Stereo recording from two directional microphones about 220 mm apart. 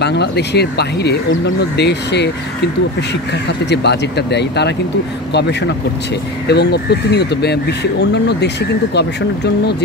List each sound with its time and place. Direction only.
0.0 s speech: 50° left (ahead or behind)
3.6 s speech: 50° left (ahead or behind)